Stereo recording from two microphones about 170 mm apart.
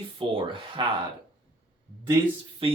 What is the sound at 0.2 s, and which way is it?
Speech, 30° right (ahead or behind).